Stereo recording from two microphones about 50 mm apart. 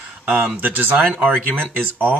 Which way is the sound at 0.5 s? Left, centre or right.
Right.